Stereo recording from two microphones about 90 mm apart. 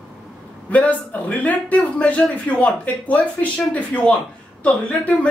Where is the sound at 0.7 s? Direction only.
15° left (ahead or behind).